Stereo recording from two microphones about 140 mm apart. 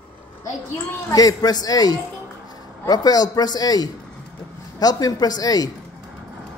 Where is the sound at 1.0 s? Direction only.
25° left (ahead or behind).